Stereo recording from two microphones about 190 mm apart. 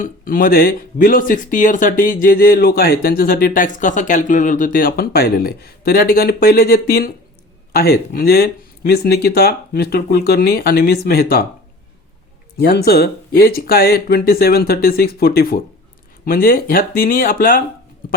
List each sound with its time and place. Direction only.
0.0 s speech: 50° left (ahead or behind)
12.5 s speech: 55° left (ahead or behind)